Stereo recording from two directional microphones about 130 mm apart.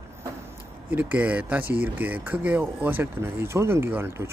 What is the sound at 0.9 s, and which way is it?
Speech, 10° right (ahead or behind).